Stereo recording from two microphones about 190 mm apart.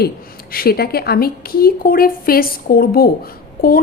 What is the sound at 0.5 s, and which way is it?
A woman's voice, 55° left (ahead or behind).